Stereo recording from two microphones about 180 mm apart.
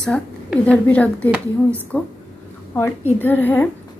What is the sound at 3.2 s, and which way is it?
Speech, 10° left (ahead or behind).